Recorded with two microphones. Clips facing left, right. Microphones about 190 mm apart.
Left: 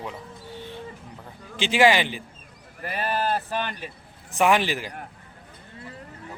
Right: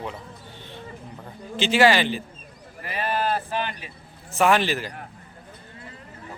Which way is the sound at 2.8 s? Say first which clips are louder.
Right 1 dB; 45° left (ahead or behind).